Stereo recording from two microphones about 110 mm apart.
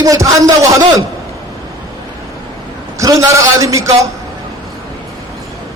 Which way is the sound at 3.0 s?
30° right (ahead or behind).